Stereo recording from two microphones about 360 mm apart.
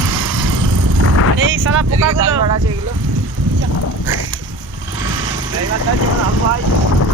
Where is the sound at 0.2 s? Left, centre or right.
Right.